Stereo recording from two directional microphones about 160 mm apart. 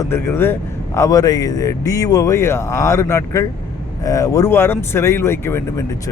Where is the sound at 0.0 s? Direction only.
15° left (ahead or behind).